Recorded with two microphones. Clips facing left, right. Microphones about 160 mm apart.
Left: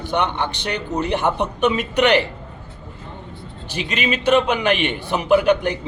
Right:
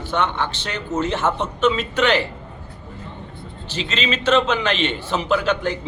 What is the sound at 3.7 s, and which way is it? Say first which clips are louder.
A man's voice: left 1 dB; 15° left (ahead or behind).